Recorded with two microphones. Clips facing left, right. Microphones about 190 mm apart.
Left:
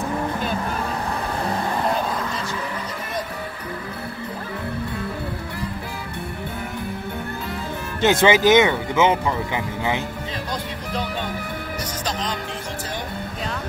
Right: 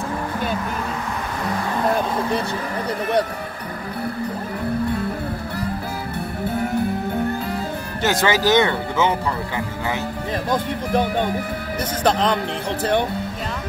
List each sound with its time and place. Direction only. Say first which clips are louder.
8.0 s speech: left 3 dB; 20° left (ahead or behind)
10.5 s speech: right 10 dB; 50° right (ahead or behind)